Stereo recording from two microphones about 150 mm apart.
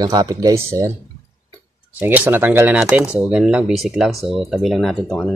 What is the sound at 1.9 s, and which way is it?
Speech, 10° right (ahead or behind).